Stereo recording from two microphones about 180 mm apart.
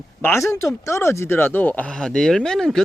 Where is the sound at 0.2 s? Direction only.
15° left (ahead or behind).